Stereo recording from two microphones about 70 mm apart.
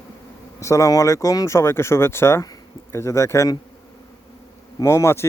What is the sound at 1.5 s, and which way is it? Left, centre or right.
Speech, left.